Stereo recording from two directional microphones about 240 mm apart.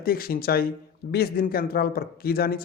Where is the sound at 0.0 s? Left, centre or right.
Left.